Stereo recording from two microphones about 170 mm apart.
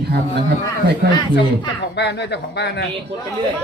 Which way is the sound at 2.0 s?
90° left.